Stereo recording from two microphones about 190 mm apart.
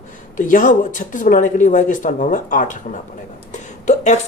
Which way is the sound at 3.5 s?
40° left (ahead or behind).